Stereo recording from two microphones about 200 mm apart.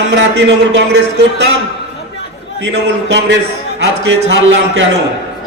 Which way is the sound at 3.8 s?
65° right (ahead or behind).